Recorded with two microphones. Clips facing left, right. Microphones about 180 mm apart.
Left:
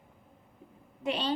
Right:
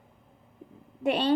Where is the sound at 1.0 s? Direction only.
55° right (ahead or behind).